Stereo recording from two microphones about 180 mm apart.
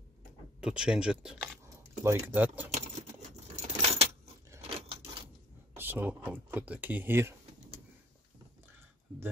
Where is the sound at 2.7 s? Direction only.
35° right (ahead or behind).